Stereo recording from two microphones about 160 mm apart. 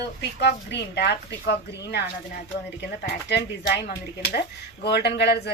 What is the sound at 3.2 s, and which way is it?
Speech, 90° left.